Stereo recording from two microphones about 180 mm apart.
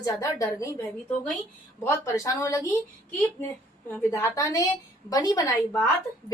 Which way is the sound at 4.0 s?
15° left (ahead or behind).